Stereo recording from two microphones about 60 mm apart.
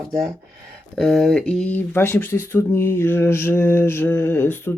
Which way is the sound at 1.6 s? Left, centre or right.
Left.